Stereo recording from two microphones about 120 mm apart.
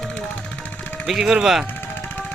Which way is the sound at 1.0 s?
5° right (ahead or behind).